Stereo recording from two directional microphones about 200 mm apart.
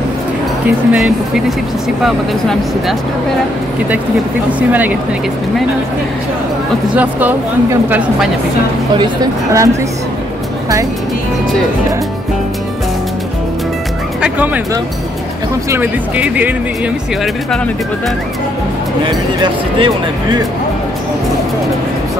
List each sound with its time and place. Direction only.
0.7 s speech: 5° right (ahead or behind)
4.6 s speech: 10° right (ahead or behind)
7.0 s speech: 10° right (ahead or behind)
8.9 s speech: 20° right (ahead or behind)
14.2 s speech: 10° right (ahead or behind)
19.0 s speech: 25° right (ahead or behind)